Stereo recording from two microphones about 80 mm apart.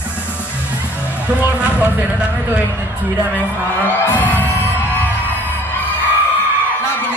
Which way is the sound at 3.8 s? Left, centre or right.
Left.